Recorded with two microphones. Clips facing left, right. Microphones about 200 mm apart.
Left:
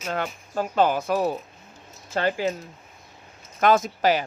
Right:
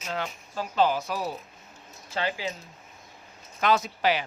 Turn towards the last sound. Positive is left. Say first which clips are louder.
# left 4 dB
turn(degrees=45)  # may be behind; listen again after turning